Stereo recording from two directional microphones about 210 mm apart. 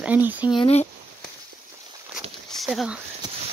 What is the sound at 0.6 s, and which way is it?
Speech, 30° left (ahead or behind).